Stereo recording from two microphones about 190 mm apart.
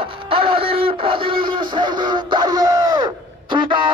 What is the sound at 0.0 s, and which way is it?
Music, 30° right (ahead or behind).